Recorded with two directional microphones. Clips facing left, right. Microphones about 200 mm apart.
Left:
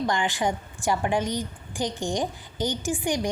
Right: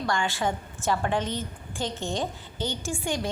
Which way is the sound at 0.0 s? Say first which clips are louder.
Left 2 dB; 15° left (ahead or behind).